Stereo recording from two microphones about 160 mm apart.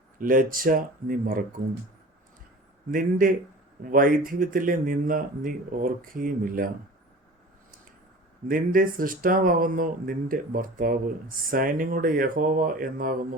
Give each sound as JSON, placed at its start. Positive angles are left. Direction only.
{"t": 0.2, "sound": "speech", "side_deg": -60}
{"t": 2.9, "sound": "speech", "side_deg": -60}
{"t": 8.4, "sound": "speech", "side_deg": -60}